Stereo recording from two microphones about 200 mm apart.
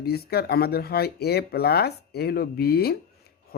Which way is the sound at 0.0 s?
50° left (ahead or behind).